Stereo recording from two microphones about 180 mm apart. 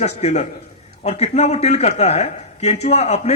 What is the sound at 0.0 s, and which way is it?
A man's voice, 40° left (ahead or behind).